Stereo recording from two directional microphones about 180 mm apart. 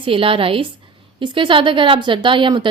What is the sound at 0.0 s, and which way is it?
A woman's voice, 30° right (ahead or behind).